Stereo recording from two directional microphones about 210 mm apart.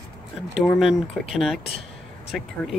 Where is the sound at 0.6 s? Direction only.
Centre (ahead or behind).